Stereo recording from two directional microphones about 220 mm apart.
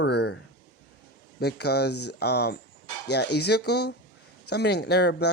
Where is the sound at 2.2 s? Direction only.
50° left (ahead or behind).